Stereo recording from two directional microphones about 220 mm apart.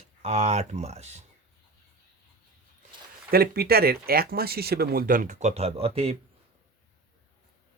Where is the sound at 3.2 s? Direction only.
45° right (ahead or behind); by 6.1 s 25° right (ahead or behind).